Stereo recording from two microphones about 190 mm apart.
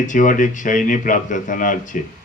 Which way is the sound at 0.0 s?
45° left (ahead or behind).